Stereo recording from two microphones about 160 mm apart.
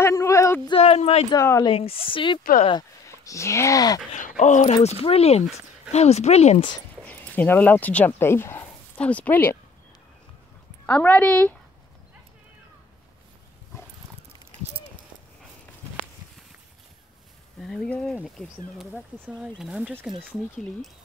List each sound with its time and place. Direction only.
0.0 s a sound: 20° left (ahead or behind)
0.7 s a sound: 40° left (ahead or behind)
1.3 s speech: 20° left (ahead or behind)
1.7 s speech: 35° left (ahead or behind)
3.3 s speech: 20° left (ahead or behind)
4.4 s speech: 50° left (ahead or behind)
4.8 s speech: 40° left (ahead or behind)
7.1 s speech: 10° left (ahead or behind)
10.9 s a woman's voice: 10° left (ahead or behind)
13.7 s dog: 15° left (ahead or behind)
17.6 s speech: 5° left (ahead or behind)
18.8 s speech: 10° right (ahead or behind)